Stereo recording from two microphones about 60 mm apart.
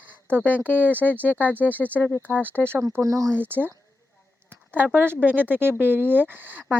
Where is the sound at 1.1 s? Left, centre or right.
Right.